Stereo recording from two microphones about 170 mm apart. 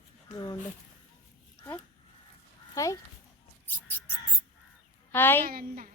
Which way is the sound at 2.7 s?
20° left (ahead or behind).